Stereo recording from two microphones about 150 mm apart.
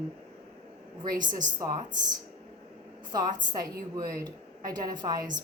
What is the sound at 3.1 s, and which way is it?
Speech, 25° right (ahead or behind).